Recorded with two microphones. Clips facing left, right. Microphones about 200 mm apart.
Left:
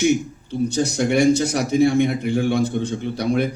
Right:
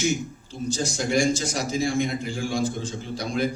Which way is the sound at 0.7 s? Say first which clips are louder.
Left 3 dB; 65° left (ahead or behind).